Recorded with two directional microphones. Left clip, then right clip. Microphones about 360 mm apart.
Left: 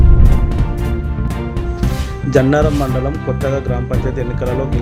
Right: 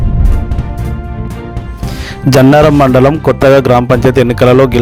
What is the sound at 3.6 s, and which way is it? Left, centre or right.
Speech, right.